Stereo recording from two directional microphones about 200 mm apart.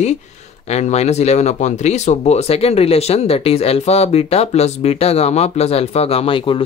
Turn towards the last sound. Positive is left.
turn(degrees=25)  # may be behind; listen again after turning